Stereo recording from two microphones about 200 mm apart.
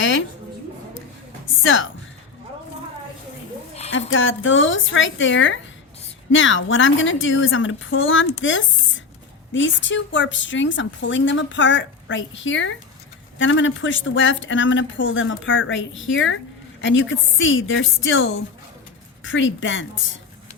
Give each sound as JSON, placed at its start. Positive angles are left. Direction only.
{"t": 0.0, "sound": "a sound", "side_deg": 70}
{"t": 1.6, "sound": "speech", "side_deg": 75}
{"t": 4.1, "sound": "speech", "side_deg": 70}